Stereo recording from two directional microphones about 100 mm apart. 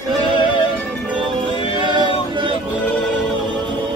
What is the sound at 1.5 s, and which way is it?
Music, 65° left (ahead or behind).